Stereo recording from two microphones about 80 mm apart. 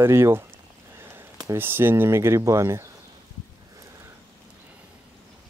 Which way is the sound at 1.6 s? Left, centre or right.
Right.